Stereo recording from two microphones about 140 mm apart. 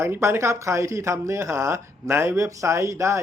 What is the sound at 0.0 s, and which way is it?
Speech, 20° right (ahead or behind).